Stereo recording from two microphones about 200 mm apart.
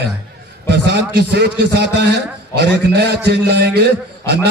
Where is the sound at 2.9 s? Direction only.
55° right (ahead or behind).